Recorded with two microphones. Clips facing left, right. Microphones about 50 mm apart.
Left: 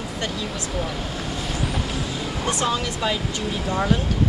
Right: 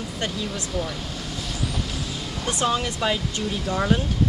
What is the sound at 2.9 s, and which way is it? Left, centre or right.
Speech, centre.